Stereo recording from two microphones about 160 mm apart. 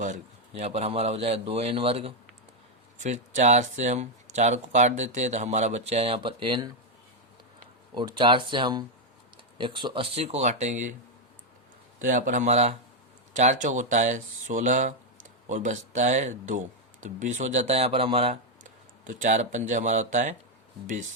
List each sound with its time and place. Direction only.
0.0 s a man's voice: 45° right (ahead or behind)
3.0 s speech: 50° right (ahead or behind); by 6.7 s 30° right (ahead or behind)
7.9 s a man's voice: 30° right (ahead or behind); by 10.8 s 50° right (ahead or behind)
11.9 s speech: 55° right (ahead or behind); by 18.3 s 35° right (ahead or behind)
18.6 s speech: 50° right (ahead or behind)